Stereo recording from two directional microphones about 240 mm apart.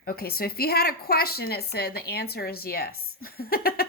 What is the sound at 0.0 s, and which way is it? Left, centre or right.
A woman's voice, left.